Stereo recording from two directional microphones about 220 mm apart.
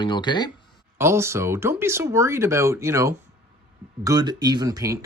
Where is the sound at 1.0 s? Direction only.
10° right (ahead or behind).